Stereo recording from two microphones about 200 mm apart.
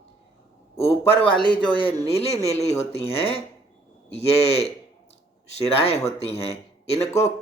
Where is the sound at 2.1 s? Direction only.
30° left (ahead or behind).